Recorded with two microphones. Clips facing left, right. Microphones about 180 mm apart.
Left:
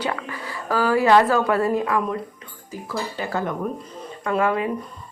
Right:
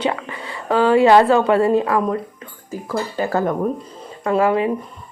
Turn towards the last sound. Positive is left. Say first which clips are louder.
# right 5 dB
turn(degrees=-25)  # may be behind; listen again after turning